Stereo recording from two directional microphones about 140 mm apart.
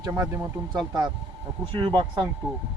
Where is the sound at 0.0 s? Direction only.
20° right (ahead or behind).